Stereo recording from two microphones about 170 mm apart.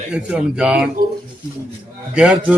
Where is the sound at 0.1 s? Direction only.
5° right (ahead or behind).